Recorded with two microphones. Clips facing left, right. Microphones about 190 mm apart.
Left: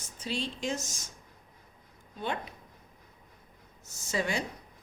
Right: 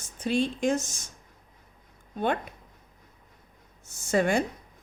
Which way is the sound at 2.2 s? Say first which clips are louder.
Right 7 dB; 55° right (ahead or behind).